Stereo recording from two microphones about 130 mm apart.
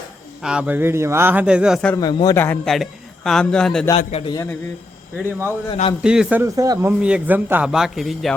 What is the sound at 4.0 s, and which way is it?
Speech, 60° left (ahead or behind).